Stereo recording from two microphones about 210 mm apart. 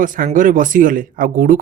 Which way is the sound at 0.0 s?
40° right (ahead or behind).